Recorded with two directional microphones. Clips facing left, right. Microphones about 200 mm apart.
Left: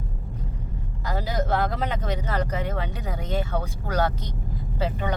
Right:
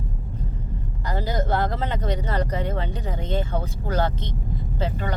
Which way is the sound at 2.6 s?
10° left (ahead or behind).